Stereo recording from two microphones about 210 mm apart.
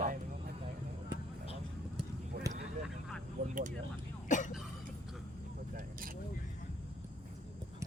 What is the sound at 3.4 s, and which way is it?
Speech, 35° right (ahead or behind).